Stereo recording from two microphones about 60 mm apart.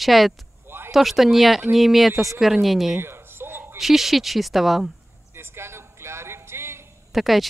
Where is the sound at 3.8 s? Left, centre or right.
Centre.